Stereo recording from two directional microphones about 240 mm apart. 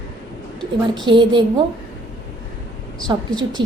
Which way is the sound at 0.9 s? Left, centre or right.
Centre.